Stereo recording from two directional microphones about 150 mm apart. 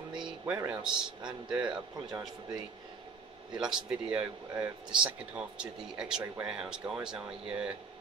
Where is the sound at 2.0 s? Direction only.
30° right (ahead or behind).